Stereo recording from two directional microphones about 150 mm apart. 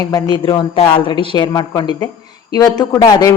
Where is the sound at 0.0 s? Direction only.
25° left (ahead or behind).